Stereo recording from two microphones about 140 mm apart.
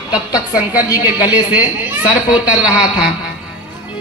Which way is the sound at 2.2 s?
10° right (ahead or behind).